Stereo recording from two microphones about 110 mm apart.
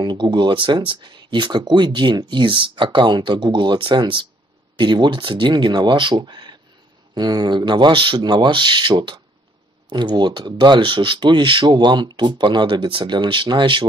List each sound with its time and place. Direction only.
0.0 s speech: 45° right (ahead or behind)